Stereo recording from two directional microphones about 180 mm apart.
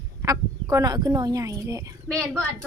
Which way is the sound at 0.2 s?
20° right (ahead or behind).